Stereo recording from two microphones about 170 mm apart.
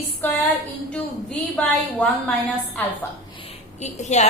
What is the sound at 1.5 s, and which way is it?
Speech, 5° left (ahead or behind).